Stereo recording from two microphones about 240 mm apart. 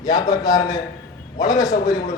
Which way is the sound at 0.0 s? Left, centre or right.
Centre.